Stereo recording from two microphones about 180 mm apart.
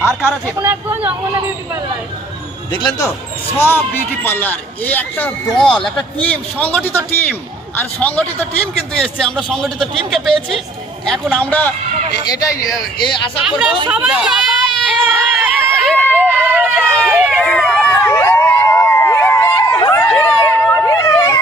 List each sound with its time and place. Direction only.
0.4 s speech: 15° right (ahead or behind)
2.7 s speech: 25° left (ahead or behind)
4.2 s a man's voice: 10° left (ahead or behind)
11.3 s a man's voice: 10° left (ahead or behind)
12.3 s speech: 20° left (ahead or behind)
13.4 s a man's voice: centre (ahead or behind)
13.9 s a sound: 5° right (ahead or behind)
16.4 s vehicle: 10° right (ahead or behind)
16.8 s speech: 5° left (ahead or behind)
17.1 s a sound: 5° right (ahead or behind)
18.0 s a sound: 15° left (ahead or behind)